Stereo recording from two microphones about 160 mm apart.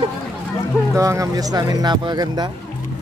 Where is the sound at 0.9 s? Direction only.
20° right (ahead or behind).